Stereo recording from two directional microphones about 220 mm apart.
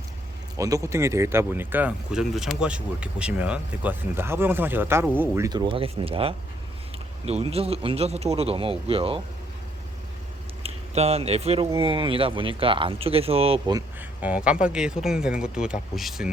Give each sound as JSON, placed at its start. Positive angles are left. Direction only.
{"t": 0.5, "sound": "speech", "side_deg": -15}
{"t": 10.6, "sound": "speech", "side_deg": -30}
{"t": 14.2, "sound": "speech", "side_deg": -5}